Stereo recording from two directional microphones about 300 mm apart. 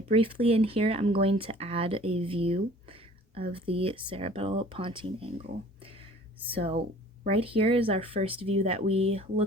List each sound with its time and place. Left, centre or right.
0.1 s speech: centre